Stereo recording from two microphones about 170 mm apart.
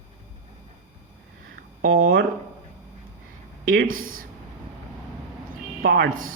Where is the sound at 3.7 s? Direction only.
55° right (ahead or behind).